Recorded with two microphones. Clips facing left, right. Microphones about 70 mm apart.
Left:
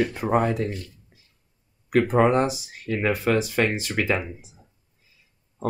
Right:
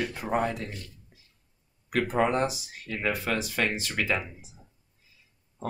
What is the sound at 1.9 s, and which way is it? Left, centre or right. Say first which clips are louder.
Speech: left 6 dB; left.